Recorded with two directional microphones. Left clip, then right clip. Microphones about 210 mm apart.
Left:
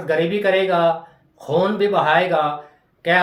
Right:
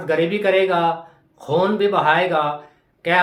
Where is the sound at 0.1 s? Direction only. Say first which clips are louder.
Even; 15° right (ahead or behind).